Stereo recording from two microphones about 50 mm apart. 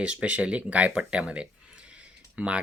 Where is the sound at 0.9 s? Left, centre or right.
Centre.